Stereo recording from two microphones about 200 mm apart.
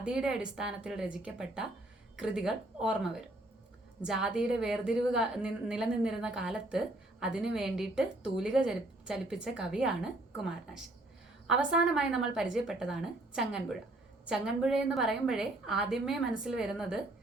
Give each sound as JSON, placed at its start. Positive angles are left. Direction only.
{"t": 0.0, "sound": "a woman's voice", "side_deg": -5}